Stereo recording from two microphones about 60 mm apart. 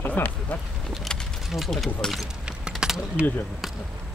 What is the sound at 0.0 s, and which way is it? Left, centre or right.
Speech, left.